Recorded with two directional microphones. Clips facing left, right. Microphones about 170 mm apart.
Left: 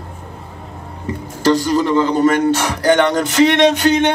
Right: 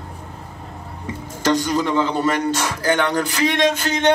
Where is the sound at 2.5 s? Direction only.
65° left (ahead or behind).